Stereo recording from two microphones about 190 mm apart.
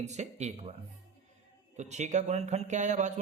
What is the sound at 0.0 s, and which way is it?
Speech, 35° right (ahead or behind).